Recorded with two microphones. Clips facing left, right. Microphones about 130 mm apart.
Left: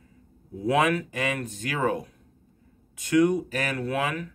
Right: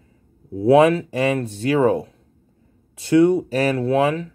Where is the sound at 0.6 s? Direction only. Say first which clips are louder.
Right 9 dB; 30° right (ahead or behind).